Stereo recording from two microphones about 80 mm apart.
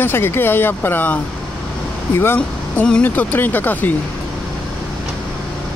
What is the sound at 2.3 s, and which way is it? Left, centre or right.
Speech, centre.